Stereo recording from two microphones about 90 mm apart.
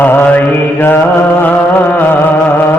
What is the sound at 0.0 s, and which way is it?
Mantra, 20° left (ahead or behind).